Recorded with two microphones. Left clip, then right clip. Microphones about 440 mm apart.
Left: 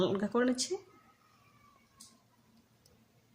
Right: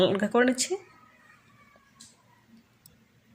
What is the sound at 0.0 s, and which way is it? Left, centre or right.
Speech, right.